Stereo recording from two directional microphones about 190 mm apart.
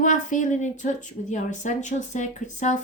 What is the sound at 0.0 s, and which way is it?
Speech, 40° left (ahead or behind).